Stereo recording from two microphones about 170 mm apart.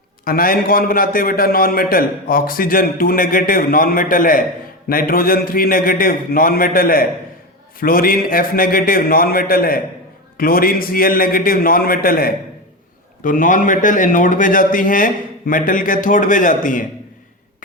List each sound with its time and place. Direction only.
0.3 s a man's voice: 55° left (ahead or behind)